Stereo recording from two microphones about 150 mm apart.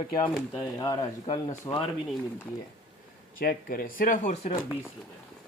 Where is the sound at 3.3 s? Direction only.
75° left (ahead or behind); by 4.5 s 55° left (ahead or behind).